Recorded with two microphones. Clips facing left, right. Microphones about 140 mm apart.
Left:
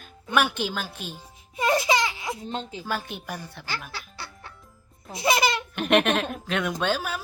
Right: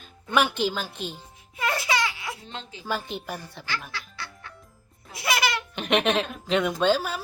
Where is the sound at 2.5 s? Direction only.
40° left (ahead or behind).